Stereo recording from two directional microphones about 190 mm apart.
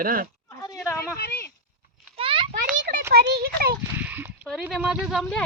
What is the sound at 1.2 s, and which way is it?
Speech, 55° left (ahead or behind).